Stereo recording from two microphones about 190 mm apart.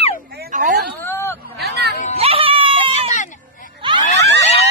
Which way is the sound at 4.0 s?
40° left (ahead or behind).